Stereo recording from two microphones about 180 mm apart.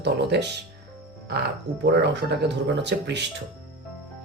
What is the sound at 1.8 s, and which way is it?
Speech, 70° right (ahead or behind).